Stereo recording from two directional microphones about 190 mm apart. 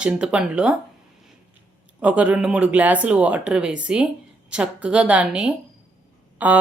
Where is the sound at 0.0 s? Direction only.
5° right (ahead or behind).